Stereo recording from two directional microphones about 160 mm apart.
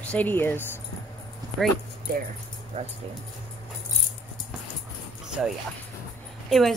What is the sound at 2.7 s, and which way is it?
Speech, 45° right (ahead or behind).